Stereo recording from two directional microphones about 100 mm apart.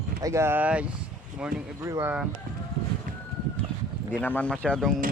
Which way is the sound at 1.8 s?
30° right (ahead or behind).